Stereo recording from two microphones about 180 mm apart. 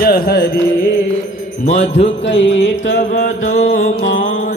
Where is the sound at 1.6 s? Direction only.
40° left (ahead or behind).